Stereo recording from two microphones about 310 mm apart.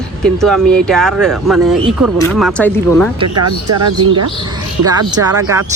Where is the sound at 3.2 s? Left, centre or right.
Right.